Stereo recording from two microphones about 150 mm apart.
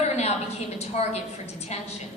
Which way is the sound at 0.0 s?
45° left (ahead or behind).